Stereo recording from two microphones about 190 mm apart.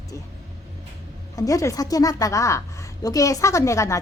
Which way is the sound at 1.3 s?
20° left (ahead or behind).